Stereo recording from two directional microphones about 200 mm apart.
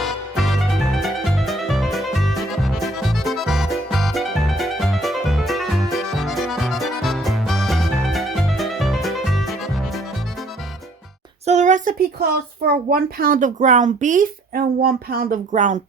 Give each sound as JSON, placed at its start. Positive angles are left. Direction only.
{"t": 0.0, "sound": "music", "side_deg": 0}
{"t": 11.4, "sound": "a child's voice", "side_deg": -35}